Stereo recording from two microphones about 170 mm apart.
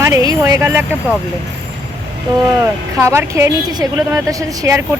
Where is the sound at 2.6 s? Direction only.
15° right (ahead or behind).